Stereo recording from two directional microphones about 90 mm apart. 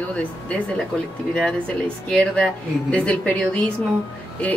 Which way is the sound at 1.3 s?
10° left (ahead or behind).